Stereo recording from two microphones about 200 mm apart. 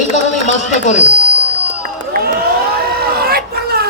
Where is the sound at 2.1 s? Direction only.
50° right (ahead or behind).